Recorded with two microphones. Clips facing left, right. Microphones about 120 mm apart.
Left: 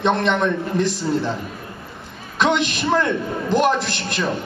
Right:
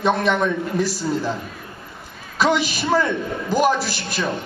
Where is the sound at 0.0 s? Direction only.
5° right (ahead or behind).